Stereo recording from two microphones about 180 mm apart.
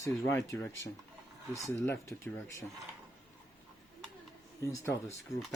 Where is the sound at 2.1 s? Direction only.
5° left (ahead or behind).